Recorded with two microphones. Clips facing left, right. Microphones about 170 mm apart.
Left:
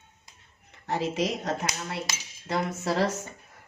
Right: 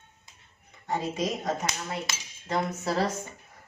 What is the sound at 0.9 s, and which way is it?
Speech, 90° left.